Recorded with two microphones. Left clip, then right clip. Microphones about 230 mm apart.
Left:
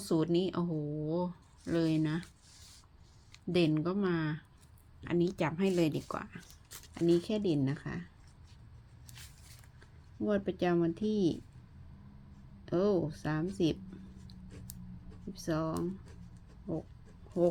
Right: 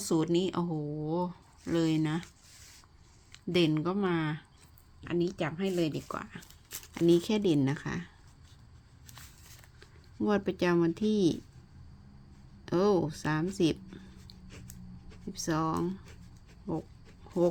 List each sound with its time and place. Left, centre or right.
0.0 s speech: centre
3.5 s speech: centre
4.9 s speech: centre
6.9 s speech: right
9.8 s speech: right
12.6 s speech: right
15.3 s speech: centre